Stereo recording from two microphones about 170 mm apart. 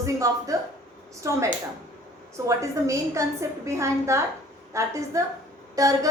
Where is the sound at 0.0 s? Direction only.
20° right (ahead or behind).